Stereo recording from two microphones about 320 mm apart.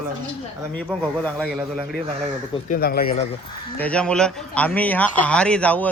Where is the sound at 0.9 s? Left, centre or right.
Centre.